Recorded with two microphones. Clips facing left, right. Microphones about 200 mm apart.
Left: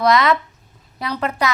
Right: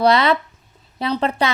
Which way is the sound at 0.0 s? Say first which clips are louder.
Right 1 dB; 30° right (ahead or behind).